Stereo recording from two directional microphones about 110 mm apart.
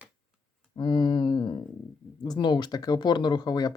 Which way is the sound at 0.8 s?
45° left (ahead or behind).